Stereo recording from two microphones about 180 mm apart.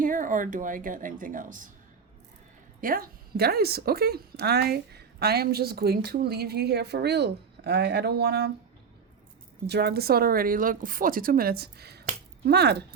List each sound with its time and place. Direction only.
0.0 s a woman's voice: 50° right (ahead or behind)
2.8 s a woman's voice: 55° right (ahead or behind)
9.6 s a woman's voice: 65° right (ahead or behind)